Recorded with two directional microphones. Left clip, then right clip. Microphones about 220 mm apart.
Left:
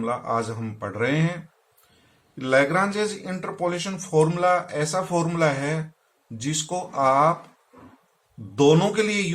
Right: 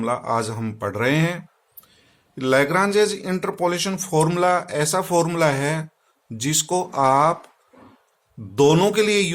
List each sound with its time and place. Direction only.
0.0 s speech: 50° right (ahead or behind)
2.4 s speech: 50° right (ahead or behind)
8.5 s speech: 50° right (ahead or behind)